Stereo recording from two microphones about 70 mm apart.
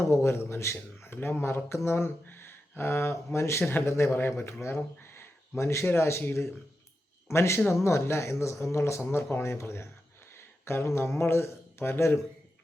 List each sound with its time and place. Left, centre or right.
0.1 s a man's voice: left